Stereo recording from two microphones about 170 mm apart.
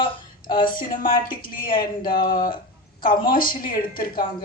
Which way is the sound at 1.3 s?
55° left (ahead or behind).